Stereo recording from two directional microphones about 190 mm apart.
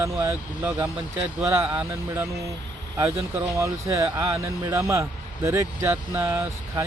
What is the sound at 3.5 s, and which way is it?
Speech, 15° right (ahead or behind).